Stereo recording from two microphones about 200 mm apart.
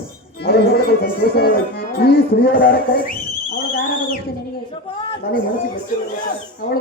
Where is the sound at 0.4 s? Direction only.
50° left (ahead or behind).